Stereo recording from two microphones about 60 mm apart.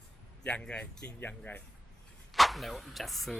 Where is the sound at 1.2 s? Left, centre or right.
Left.